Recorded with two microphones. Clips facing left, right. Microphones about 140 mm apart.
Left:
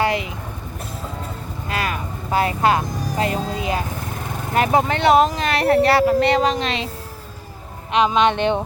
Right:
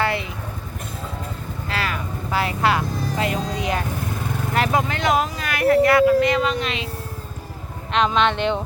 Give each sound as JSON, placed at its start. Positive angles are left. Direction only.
{"t": 0.0, "sound": "vehicle", "side_deg": 15}
{"t": 1.7, "sound": "vehicle", "side_deg": 20}
{"t": 2.9, "sound": "insect", "side_deg": 10}
{"t": 3.2, "sound": "a sound", "side_deg": 35}
{"t": 3.5, "sound": "vehicle", "side_deg": 25}
{"t": 4.6, "sound": "speech", "side_deg": 25}
{"t": 7.9, "sound": "speech", "side_deg": 10}